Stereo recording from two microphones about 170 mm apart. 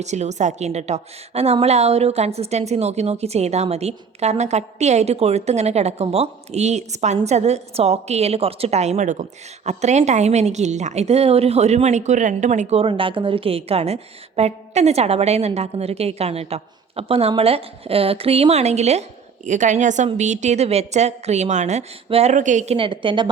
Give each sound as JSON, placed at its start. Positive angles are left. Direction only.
{"t": 0.0, "sound": "a woman's voice", "side_deg": -40}